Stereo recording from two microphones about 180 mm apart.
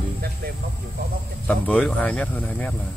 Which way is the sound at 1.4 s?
5° left (ahead or behind).